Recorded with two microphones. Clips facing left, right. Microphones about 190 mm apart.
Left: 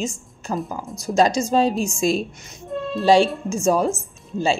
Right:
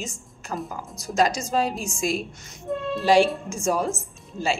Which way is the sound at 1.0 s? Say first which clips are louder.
Left 5 dB; 25° left (ahead or behind).